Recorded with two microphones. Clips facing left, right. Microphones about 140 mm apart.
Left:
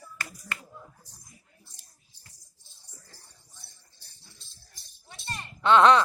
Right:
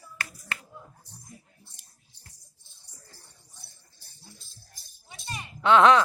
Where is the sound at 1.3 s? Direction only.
65° right (ahead or behind).